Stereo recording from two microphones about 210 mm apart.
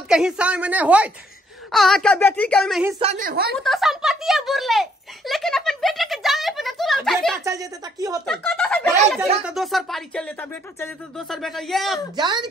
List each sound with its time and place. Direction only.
0.1 s a woman's voice: 5° right (ahead or behind)
3.2 s speech: 45° right (ahead or behind)
3.5 s a sound: centre (ahead or behind)
7.4 s a woman's voice: 15° right (ahead or behind)
8.3 s speech: 5° left (ahead or behind)
12.2 s a woman's voice: 20° right (ahead or behind)